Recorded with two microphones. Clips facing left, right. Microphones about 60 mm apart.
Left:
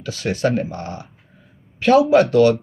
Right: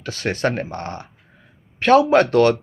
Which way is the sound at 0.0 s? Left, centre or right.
Right.